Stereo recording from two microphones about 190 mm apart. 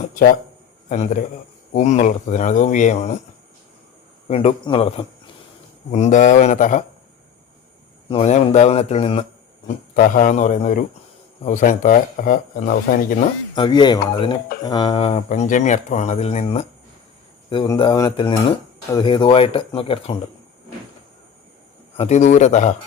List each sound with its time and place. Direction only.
0.9 s speech: 40° left (ahead or behind)
4.3 s speech: 30° left (ahead or behind)
8.1 s speech: 35° left (ahead or behind)
9.6 s speech: 45° left (ahead or behind)
13.6 s speech: 25° left (ahead or behind)
17.5 s speech: 25° left (ahead or behind)
21.9 s speech: 35° left (ahead or behind)